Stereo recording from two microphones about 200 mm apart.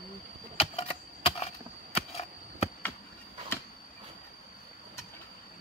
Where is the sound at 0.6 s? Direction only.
30° left (ahead or behind).